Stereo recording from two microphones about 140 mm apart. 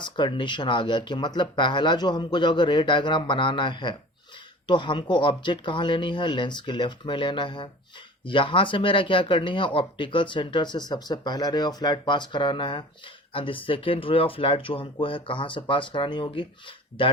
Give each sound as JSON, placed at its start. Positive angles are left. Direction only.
{"t": 0.0, "sound": "speech", "side_deg": 35}